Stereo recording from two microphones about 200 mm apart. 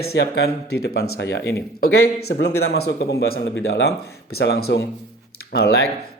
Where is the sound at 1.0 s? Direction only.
75° left (ahead or behind); by 5.8 s 55° left (ahead or behind).